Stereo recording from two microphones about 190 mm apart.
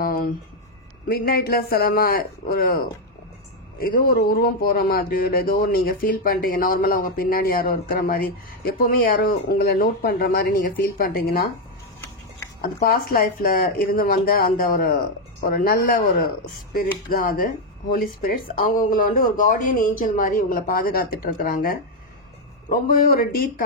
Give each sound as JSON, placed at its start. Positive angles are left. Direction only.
{"t": 0.0, "sound": "a sound", "side_deg": 50}
{"t": 1.0, "sound": "speech", "side_deg": 55}
{"t": 3.8, "sound": "speech", "side_deg": 50}
{"t": 12.6, "sound": "speech", "side_deg": 50}